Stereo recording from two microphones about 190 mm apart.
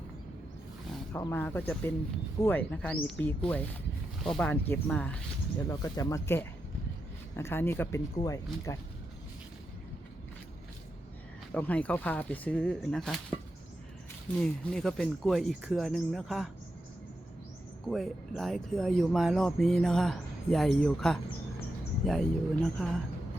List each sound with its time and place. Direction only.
1.1 s speech: 10° left (ahead or behind)
5.6 s speech: 15° left (ahead or behind)
11.5 s speech: 5° left (ahead or behind)
14.3 s speech: 5° left (ahead or behind)
17.8 s speech: centre (ahead or behind)